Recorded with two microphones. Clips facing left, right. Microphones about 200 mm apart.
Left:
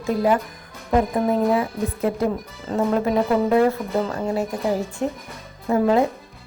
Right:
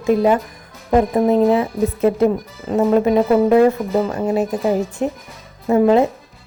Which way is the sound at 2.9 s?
20° right (ahead or behind).